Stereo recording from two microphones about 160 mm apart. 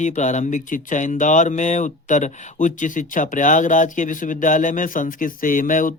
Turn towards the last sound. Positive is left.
turn(degrees=55)  # may be behind; listen again after turning